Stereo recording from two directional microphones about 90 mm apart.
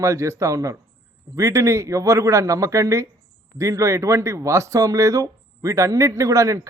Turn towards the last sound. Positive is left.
turn(degrees=-35)  # may be behind; listen again after turning